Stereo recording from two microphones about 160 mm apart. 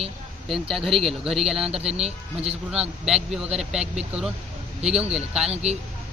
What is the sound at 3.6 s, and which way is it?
Speech, 5° right (ahead or behind).